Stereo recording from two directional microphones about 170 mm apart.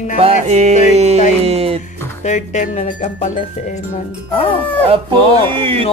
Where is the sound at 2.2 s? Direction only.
45° left (ahead or behind).